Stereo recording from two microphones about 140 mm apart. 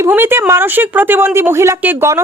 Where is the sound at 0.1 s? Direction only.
15° right (ahead or behind).